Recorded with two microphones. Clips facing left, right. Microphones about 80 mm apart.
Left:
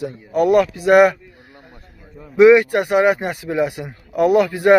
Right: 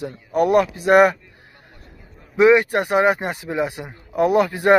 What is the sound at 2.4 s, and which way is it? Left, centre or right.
A man's voice, right.